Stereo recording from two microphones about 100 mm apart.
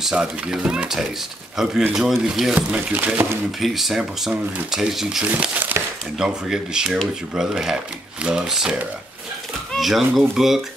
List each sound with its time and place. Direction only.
0.0 s speech: 5° right (ahead or behind)
3.5 s speech: centre (ahead or behind)
5.2 s speech: 15° right (ahead or behind)
6.1 s speech: 5° right (ahead or behind)